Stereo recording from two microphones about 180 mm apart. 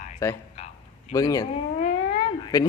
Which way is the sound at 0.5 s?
40° left (ahead or behind).